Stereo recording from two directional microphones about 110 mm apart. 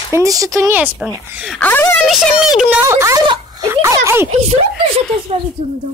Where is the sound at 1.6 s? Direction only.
20° left (ahead or behind).